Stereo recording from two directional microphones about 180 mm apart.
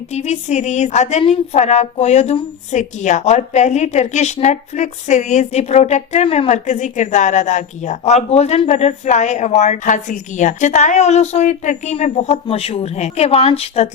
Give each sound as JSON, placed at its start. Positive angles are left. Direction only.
{"t": 0.1, "sound": "a woman's voice", "side_deg": 40}